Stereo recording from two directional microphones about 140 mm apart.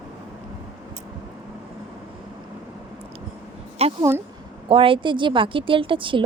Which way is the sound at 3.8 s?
45° right (ahead or behind).